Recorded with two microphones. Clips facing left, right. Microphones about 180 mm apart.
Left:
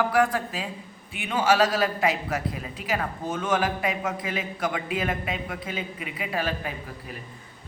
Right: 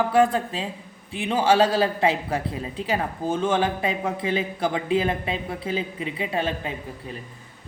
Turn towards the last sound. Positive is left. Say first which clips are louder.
# right 3 dB
turn(degrees=-25)  # may be behind; listen again after turning